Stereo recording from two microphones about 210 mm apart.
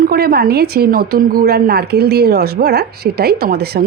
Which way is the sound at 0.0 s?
45° right (ahead or behind).